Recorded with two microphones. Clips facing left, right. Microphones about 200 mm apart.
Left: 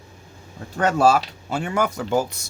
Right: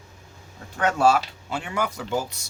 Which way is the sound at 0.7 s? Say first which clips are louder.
Left 2 dB; 40° left (ahead or behind).